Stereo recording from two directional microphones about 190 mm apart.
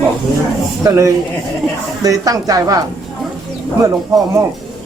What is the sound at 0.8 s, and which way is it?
A woman's voice, 15° right (ahead or behind).